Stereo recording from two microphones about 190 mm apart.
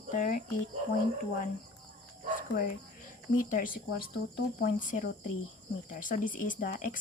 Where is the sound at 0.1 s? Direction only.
45° left (ahead or behind).